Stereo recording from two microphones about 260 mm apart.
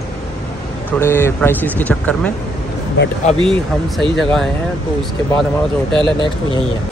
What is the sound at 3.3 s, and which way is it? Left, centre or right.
Speech, centre.